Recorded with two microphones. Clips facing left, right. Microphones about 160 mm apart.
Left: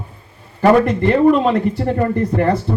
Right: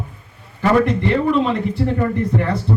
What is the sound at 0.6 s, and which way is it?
A man's voice, 55° left (ahead or behind).